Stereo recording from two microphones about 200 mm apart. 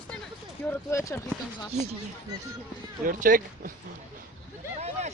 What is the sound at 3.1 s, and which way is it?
Speech, 40° right (ahead or behind).